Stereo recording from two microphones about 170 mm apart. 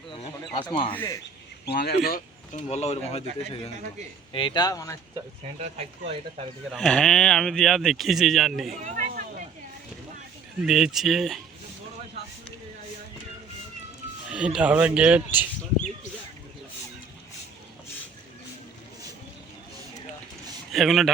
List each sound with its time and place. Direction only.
0.5 s speech: 30° left (ahead or behind)
0.9 s a man's voice: 15° left (ahead or behind)
1.6 s speech: 70° left (ahead or behind)
2.6 s speech: 40° left (ahead or behind)
4.3 s a man's voice: 30° left (ahead or behind)
6.7 s speech: centre (ahead or behind)
8.8 s a sound: 50° right (ahead or behind)
10.6 s speech: 5° right (ahead or behind)
14.3 s speech: 5° right (ahead or behind)
20.7 s speech: centre (ahead or behind)